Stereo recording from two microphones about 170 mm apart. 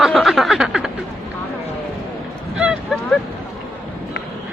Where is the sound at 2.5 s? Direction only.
5° right (ahead or behind).